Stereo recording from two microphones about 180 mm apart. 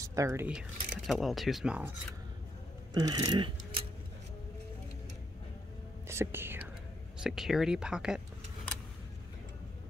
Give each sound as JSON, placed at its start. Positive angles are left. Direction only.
{"t": 0.0, "sound": "speech", "side_deg": -15}
{"t": 2.9, "sound": "speech", "side_deg": -25}
{"t": 6.0, "sound": "speech", "side_deg": -15}